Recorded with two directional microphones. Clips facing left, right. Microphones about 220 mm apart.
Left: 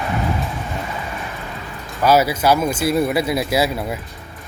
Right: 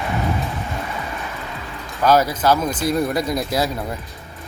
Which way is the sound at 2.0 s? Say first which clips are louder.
Left 1 dB; 10° left (ahead or behind).